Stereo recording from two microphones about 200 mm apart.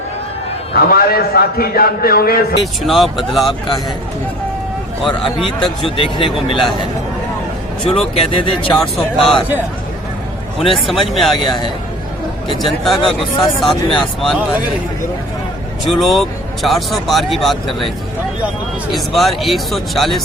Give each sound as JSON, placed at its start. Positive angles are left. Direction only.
{"t": 0.7, "sound": "a man's voice", "side_deg": 50}
{"t": 2.8, "sound": "speech", "side_deg": 0}
{"t": 5.4, "sound": "speech", "side_deg": 0}
{"t": 5.8, "sound": "speech", "side_deg": 25}
{"t": 7.9, "sound": "speech", "side_deg": 30}
{"t": 8.7, "sound": "speech", "side_deg": 0}
{"t": 10.6, "sound": "speech", "side_deg": 0}
{"t": 12.6, "sound": "speech", "side_deg": 0}
{"t": 15.9, "sound": "speech", "side_deg": 0}